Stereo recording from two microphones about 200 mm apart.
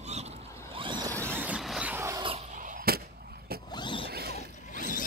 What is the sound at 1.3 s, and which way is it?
Vehicle, 5° right (ahead or behind).